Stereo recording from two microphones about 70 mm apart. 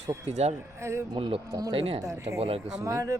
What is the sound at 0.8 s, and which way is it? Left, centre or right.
Speech, right.